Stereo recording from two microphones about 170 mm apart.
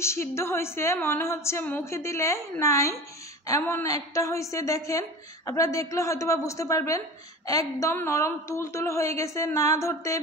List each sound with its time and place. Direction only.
0.0 s a woman's voice: 15° left (ahead or behind)